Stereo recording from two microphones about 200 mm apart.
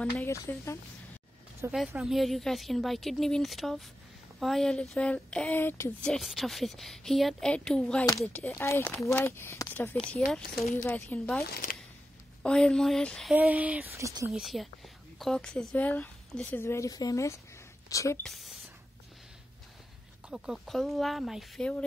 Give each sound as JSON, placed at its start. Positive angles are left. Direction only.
{"t": 0.0, "sound": "speech", "side_deg": 10}
{"t": 1.6, "sound": "speech", "side_deg": -10}
{"t": 12.4, "sound": "speech", "side_deg": 5}
{"t": 13.3, "sound": "speech", "side_deg": -5}
{"t": 14.3, "sound": "speech", "side_deg": 0}
{"t": 18.2, "sound": "speech", "side_deg": 0}
{"t": 20.2, "sound": "speech", "side_deg": -5}